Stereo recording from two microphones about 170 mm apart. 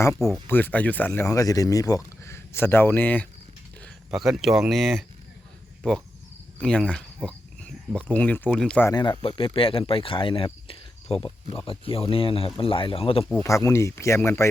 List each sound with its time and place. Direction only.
0.4 s speech: 10° left (ahead or behind)
3.8 s speech: centre (ahead or behind)
8.9 s speech: 25° left (ahead or behind)
13.4 s speech: 20° left (ahead or behind)